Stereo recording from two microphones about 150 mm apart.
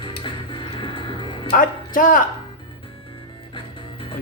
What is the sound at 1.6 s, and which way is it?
Speech, 65° left (ahead or behind).